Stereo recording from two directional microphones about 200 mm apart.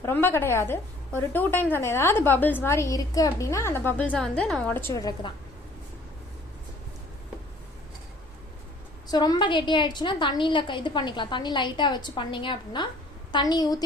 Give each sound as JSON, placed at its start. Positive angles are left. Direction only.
{"t": 0.0, "sound": "a woman's voice", "side_deg": 10}
{"t": 9.0, "sound": "a woman's voice", "side_deg": 20}